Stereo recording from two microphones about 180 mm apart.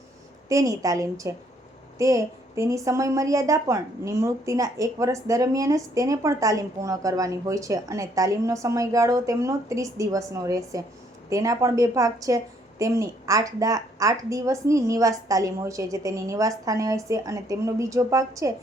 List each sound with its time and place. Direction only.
0.4 s a woman's voice: 20° right (ahead or behind)